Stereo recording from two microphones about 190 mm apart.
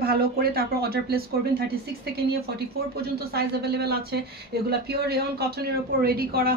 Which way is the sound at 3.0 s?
55° right (ahead or behind).